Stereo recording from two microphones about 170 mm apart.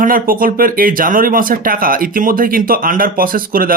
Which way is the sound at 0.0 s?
55° right (ahead or behind).